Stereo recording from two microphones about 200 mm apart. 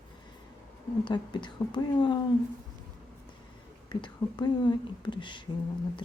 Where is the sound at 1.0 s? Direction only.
25° left (ahead or behind).